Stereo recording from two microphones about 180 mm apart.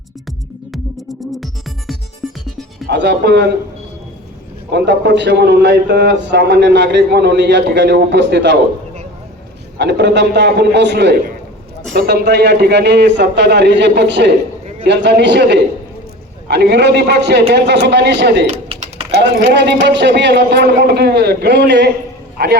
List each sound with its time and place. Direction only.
0.7 s music: centre (ahead or behind)
2.8 s a man's voice: 65° right (ahead or behind)
4.7 s a man's voice: 70° right (ahead or behind)
9.7 s a man's voice: 70° right (ahead or behind)
18.4 s typing: 35° right (ahead or behind)
19.5 s a man's voice: 75° right (ahead or behind)
22.4 s a man's voice: 60° right (ahead or behind)